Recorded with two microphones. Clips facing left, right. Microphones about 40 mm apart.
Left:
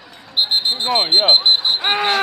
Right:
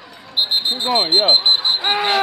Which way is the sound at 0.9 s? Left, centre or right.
Left.